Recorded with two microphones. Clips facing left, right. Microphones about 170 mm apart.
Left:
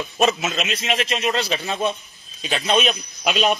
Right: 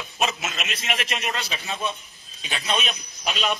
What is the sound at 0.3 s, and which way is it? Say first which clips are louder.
A man's voice: left 8 dB; 50° left (ahead or behind).